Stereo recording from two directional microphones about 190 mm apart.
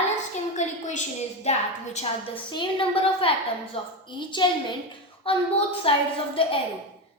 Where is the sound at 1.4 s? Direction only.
35° left (ahead or behind).